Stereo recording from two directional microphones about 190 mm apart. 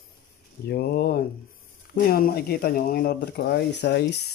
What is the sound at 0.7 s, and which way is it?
Speech, 55° left (ahead or behind).